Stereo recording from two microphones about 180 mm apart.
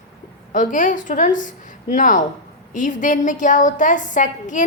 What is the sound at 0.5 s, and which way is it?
A woman's voice, 45° left (ahead or behind).